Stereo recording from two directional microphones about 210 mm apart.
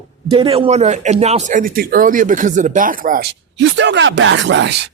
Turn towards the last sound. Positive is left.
turn(degrees=-55)  # may be behind; listen again after turning